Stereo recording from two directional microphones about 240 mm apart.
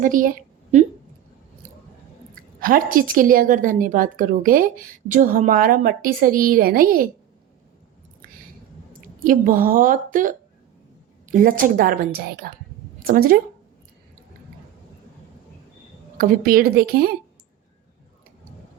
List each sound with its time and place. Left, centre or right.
0.0 s a woman's voice: right
2.3 s a woman's voice: right
9.0 s a woman's voice: right
16.1 s a woman's voice: right